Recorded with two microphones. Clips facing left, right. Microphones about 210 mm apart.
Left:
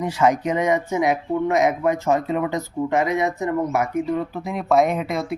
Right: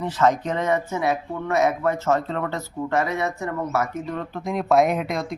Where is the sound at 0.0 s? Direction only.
10° left (ahead or behind).